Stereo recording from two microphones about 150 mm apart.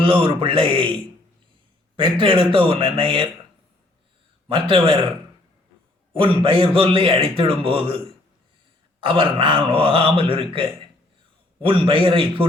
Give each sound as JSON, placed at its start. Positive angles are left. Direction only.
{"t": 0.0, "sound": "a man's voice", "side_deg": -35}
{"t": 4.4, "sound": "a man's voice", "side_deg": -35}
{"t": 6.1, "sound": "a man's voice", "side_deg": -35}
{"t": 11.6, "sound": "a man's voice", "side_deg": -35}